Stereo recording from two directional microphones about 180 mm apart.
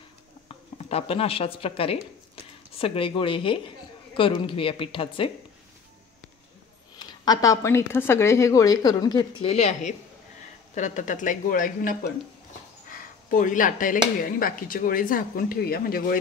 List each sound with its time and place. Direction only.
0.5 s speech: 35° left (ahead or behind)
7.0 s speech: 20° left (ahead or behind); by 16.2 s 55° left (ahead or behind)